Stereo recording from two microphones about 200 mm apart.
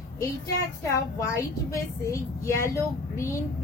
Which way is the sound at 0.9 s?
15° left (ahead or behind).